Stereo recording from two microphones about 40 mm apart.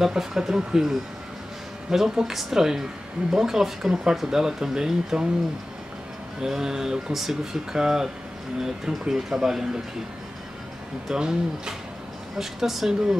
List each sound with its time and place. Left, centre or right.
0.0 s speech: centre
6.4 s speech: centre
11.1 s speech: centre
12.4 s speech: centre